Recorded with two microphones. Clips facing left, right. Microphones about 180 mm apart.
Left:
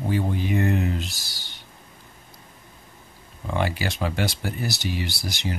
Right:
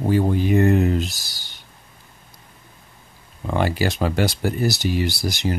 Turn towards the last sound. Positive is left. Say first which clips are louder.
# right 7 dB
turn(degrees=-40)  # may be behind; listen again after turning